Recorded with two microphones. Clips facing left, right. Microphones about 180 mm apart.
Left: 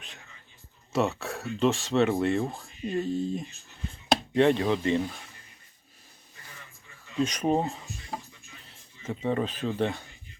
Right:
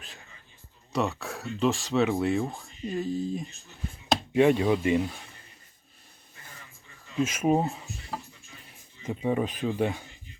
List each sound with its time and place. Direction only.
0.9 s speech: centre (ahead or behind)
7.2 s speech: 5° right (ahead or behind)